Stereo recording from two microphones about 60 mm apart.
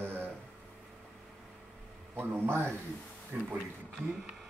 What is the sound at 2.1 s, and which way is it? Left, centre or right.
Speech, right.